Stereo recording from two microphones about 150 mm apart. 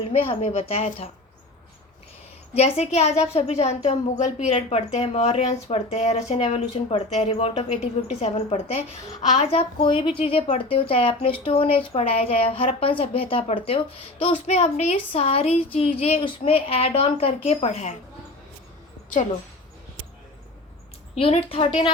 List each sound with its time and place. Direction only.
0.0 s a woman's voice: 40° left (ahead or behind)
2.6 s a woman's voice: 45° left (ahead or behind)
21.2 s a woman's voice: 40° left (ahead or behind)